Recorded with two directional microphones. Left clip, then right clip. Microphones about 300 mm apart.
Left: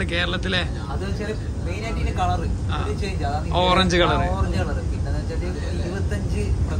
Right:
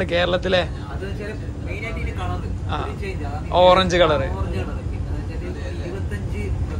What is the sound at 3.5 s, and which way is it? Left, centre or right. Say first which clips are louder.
Speech: right 5 dB; centre.